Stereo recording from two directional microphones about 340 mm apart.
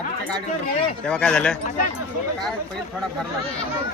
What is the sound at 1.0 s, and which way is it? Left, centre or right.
Speech, centre.